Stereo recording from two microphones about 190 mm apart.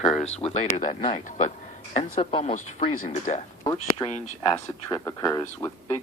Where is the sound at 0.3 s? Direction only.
35° left (ahead or behind).